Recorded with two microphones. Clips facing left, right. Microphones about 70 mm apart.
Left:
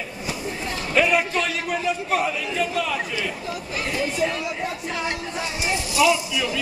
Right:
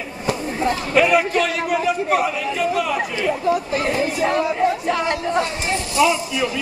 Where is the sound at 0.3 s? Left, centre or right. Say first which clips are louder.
Right 10 dB; right.